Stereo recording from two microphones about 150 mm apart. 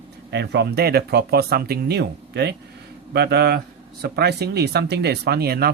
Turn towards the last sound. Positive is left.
turn(degrees=-90)